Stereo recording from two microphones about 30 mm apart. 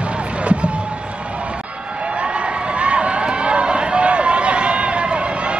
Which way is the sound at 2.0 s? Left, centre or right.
Right.